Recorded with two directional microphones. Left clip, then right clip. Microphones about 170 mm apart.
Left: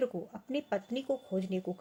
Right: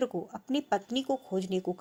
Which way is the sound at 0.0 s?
20° right (ahead or behind).